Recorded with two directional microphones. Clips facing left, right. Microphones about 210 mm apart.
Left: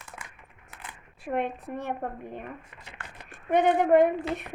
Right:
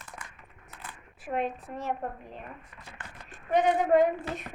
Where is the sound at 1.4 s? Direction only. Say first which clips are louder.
Left 2 dB; 60° left (ahead or behind).